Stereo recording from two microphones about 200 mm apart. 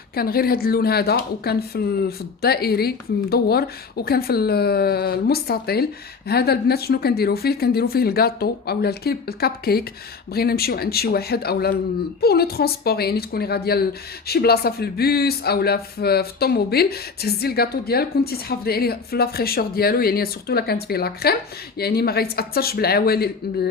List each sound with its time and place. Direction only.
0.1 s speech: 50° left (ahead or behind)